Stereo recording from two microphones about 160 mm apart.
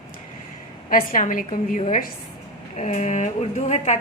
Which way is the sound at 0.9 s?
60° left (ahead or behind).